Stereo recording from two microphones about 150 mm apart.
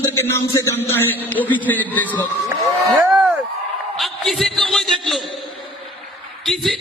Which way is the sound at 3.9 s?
Centre (ahead or behind).